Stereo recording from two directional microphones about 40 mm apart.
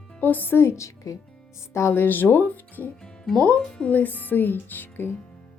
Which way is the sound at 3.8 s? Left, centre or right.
Left.